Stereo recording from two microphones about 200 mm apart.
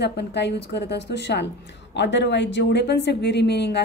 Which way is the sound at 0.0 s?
60° left (ahead or behind).